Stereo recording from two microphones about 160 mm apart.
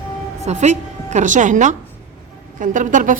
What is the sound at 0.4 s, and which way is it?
A woman's voice, 45° right (ahead or behind).